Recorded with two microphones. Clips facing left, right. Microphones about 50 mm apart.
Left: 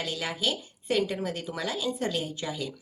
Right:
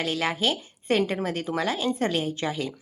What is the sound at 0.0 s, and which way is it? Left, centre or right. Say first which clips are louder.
A woman's voice: right 5 dB; right.